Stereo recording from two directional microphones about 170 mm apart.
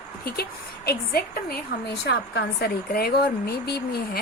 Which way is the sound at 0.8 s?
65° left (ahead or behind).